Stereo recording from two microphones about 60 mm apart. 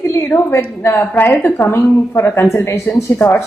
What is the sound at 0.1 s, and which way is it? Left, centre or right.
Speech, left.